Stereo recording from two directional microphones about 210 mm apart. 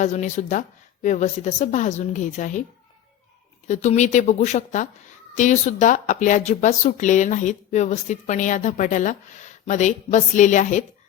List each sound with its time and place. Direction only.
0.0 s speech: 35° left (ahead or behind)
3.7 s speech: 35° left (ahead or behind)